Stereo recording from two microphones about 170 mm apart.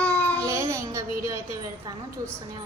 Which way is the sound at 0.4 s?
15° right (ahead or behind).